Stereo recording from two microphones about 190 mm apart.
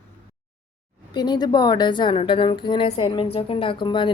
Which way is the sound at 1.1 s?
20° left (ahead or behind).